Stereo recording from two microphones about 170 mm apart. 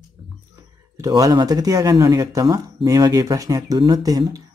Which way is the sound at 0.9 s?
20° right (ahead or behind).